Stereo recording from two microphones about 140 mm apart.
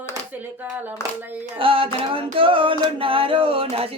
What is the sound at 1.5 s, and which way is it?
Music, 40° right (ahead or behind).